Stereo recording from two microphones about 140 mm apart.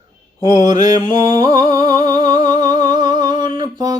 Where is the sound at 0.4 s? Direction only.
30° right (ahead or behind).